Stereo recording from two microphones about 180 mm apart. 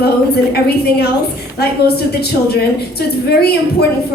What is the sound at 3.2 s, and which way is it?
Speech, 65° left (ahead or behind).